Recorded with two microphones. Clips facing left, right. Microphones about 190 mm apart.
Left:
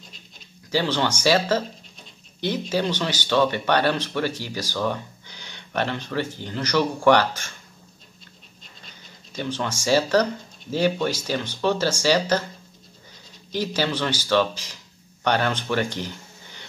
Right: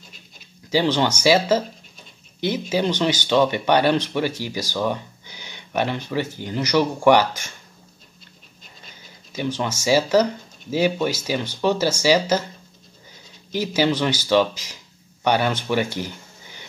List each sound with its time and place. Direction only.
0.7 s speech: 15° right (ahead or behind)
9.3 s speech: 10° right (ahead or behind)
13.5 s speech: 10° right (ahead or behind)